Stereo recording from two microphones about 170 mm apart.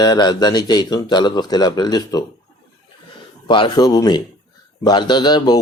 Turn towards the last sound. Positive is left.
turn(degrees=25)  # may be behind; listen again after turning